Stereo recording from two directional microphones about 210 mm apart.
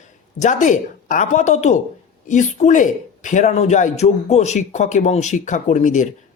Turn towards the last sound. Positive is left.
turn(degrees=35)  # may be behind; listen again after turning